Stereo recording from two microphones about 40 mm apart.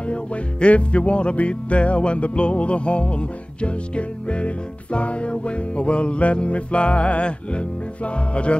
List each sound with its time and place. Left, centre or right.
0.0 s music: left